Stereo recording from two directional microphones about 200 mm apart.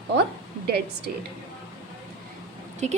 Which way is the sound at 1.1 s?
50° right (ahead or behind).